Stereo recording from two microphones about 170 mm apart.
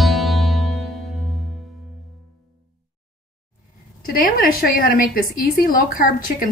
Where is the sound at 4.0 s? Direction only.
55° left (ahead or behind).